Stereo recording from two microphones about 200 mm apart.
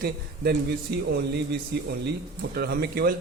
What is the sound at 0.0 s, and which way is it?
A man's voice, 55° right (ahead or behind).